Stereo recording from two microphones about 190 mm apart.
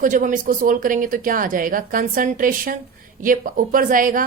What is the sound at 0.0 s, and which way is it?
A woman's voice, 45° right (ahead or behind).